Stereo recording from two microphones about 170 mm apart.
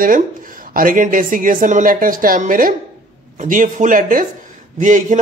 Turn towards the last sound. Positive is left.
turn(degrees=-50)  # may be behind; listen again after turning